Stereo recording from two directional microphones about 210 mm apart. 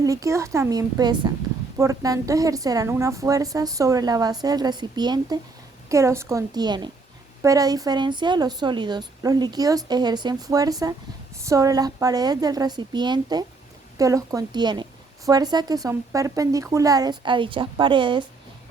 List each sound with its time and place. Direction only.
0.0 s a woman's voice: 15° right (ahead or behind)